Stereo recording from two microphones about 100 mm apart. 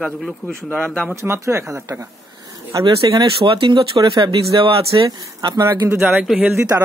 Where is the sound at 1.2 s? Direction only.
30° right (ahead or behind).